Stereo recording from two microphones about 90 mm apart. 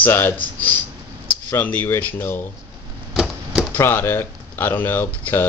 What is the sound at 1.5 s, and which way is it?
Speech, 20° left (ahead or behind).